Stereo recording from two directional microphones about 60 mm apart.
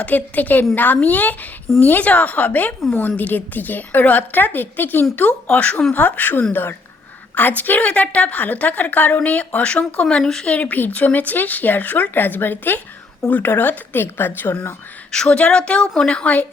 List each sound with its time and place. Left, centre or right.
0.0 s a woman's voice: left
15.1 s a woman's voice: centre